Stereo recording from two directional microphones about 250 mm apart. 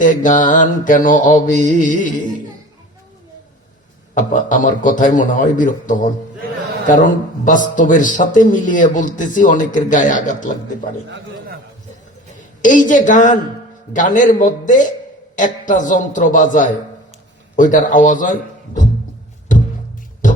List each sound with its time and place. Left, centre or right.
0.0 s a man's voice: left
4.1 s a man's voice: left
12.6 s a man's voice: left
19.5 s music: left